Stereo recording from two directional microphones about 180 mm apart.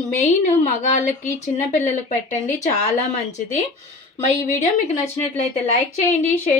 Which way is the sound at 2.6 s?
40° left (ahead or behind).